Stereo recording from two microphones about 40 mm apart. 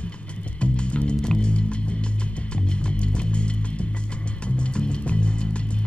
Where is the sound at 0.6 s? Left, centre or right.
Left.